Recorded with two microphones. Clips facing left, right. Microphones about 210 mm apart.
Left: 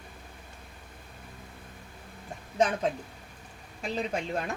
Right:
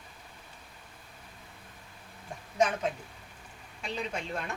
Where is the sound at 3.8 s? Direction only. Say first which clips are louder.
Left 4 dB; 40° left (ahead or behind).